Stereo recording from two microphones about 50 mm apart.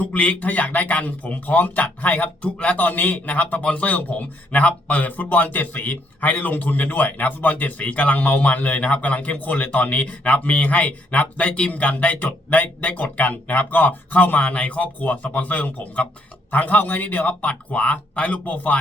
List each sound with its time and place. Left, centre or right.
0.0 s a man's voice: left
2.7 s a man's voice: left
11.7 s a man's voice: left